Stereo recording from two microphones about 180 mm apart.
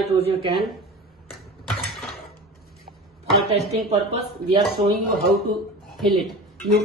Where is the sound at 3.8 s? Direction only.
35° right (ahead or behind).